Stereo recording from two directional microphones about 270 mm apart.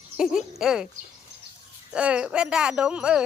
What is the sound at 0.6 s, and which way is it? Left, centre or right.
Speech, centre.